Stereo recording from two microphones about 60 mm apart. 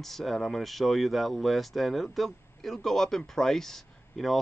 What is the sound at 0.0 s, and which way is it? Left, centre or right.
Speech, centre.